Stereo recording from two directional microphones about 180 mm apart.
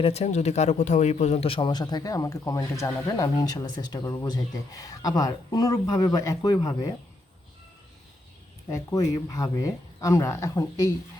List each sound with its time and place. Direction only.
0.0 s a man's voice: 35° left (ahead or behind)
8.7 s a man's voice: 20° left (ahead or behind)